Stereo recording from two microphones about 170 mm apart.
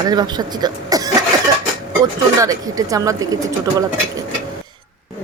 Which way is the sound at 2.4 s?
20° right (ahead or behind).